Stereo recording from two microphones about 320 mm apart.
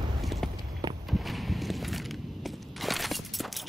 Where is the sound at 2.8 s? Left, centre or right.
Centre.